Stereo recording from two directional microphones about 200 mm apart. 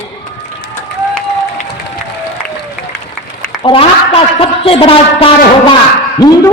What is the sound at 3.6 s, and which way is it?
A woman's voice, 25° left (ahead or behind).